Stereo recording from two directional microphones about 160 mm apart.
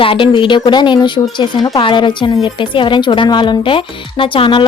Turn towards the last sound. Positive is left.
turn(degrees=30)  # may be behind; listen again after turning